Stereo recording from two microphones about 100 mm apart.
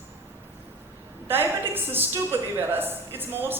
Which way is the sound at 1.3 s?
20° right (ahead or behind).